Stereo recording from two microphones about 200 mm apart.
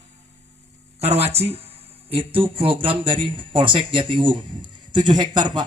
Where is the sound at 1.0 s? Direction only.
30° right (ahead or behind).